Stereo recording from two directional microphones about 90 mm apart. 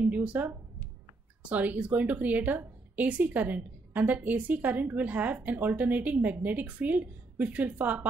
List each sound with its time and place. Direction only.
0.0 s a woman's voice: 15° right (ahead or behind)